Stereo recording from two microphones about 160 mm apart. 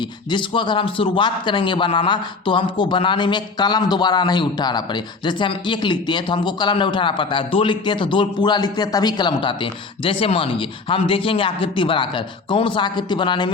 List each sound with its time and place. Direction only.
0.3 s a man's voice: 30° left (ahead or behind)